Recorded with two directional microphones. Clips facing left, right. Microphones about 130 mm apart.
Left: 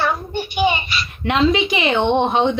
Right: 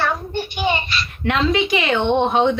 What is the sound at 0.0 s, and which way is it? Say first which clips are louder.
A child's voice: left 1 dB; 10° left (ahead or behind).